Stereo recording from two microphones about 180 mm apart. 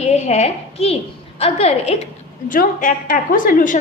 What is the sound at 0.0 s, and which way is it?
A woman's voice, 35° left (ahead or behind).